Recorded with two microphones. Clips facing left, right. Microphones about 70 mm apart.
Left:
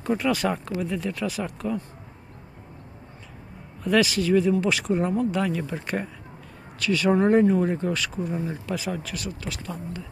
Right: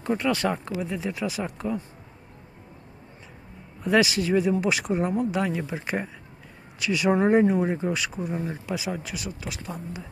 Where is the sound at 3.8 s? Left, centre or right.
Centre.